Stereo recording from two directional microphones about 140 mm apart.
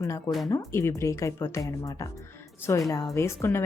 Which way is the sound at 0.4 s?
20° left (ahead or behind).